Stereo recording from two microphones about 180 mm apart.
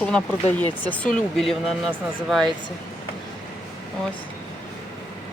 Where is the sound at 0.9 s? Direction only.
5° left (ahead or behind).